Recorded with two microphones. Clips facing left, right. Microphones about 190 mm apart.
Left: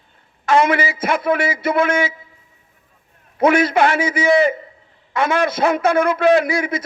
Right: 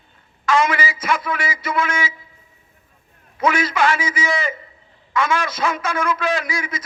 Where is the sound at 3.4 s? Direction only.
60° left (ahead or behind).